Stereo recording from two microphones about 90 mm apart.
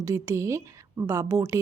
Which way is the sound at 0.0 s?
35° right (ahead or behind).